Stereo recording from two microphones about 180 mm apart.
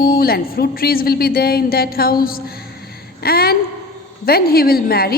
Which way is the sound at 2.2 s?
55° left (ahead or behind).